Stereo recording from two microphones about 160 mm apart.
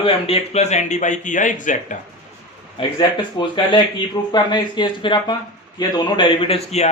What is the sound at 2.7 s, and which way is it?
Speech, 30° left (ahead or behind).